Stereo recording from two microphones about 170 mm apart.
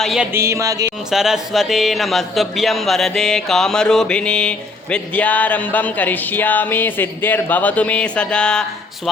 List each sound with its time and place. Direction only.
0.0 s speech: centre (ahead or behind)
0.3 s a sound: 15° right (ahead or behind)
1.1 s speech: centre (ahead or behind)